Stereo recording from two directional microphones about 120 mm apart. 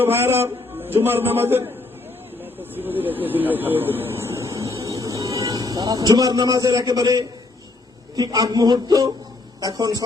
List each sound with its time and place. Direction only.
0.0 s a man's voice: 20° right (ahead or behind)